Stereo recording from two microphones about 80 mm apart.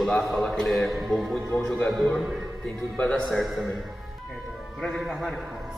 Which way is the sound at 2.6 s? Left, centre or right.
Centre.